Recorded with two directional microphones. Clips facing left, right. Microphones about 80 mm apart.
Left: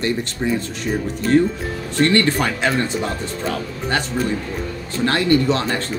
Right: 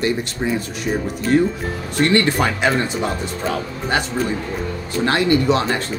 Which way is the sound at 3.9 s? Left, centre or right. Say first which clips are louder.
Right 1 dB; centre.